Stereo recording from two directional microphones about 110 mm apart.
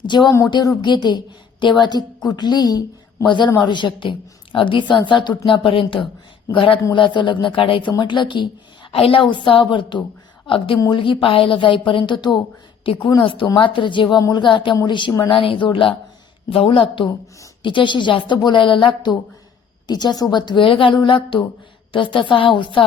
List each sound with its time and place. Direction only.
0.0 s a woman's voice: 40° left (ahead or behind)
14.2 s a woman's voice: 30° left (ahead or behind)
14.4 s a woman's voice: 45° left (ahead or behind)